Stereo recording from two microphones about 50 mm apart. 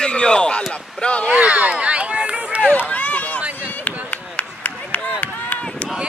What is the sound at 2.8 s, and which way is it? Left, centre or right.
Run, left.